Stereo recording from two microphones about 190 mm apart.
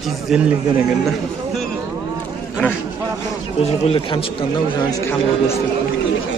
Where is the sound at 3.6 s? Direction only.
30° left (ahead or behind).